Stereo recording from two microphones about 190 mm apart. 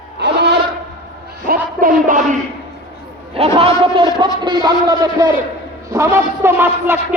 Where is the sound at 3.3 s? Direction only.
30° right (ahead or behind).